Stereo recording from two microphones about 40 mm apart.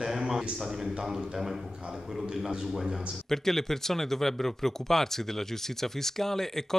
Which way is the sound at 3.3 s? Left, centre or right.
Centre.